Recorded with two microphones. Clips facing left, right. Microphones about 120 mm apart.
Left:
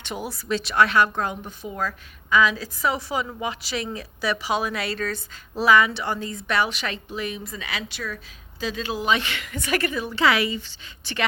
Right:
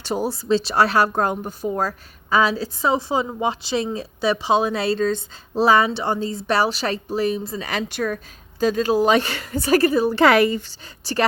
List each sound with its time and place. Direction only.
0.0 s speech: 35° right (ahead or behind)
7.7 s speech: 45° right (ahead or behind)
10.2 s a woman's voice: 50° right (ahead or behind)